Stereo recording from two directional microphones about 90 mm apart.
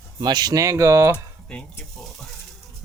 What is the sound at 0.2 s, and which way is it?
Speech, 50° right (ahead or behind).